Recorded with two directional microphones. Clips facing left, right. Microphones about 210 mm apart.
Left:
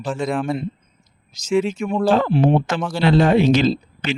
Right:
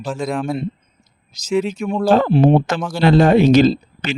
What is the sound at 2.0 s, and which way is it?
Speech, 40° right (ahead or behind).